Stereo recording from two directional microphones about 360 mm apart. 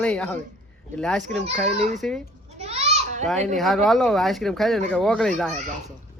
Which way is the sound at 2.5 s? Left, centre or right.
Centre.